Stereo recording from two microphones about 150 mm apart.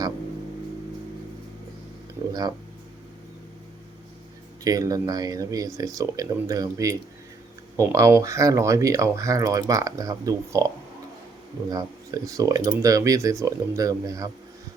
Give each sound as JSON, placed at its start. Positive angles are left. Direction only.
{"t": 4.6, "sound": "speech", "side_deg": -25}
{"t": 11.7, "sound": "speech", "side_deg": -25}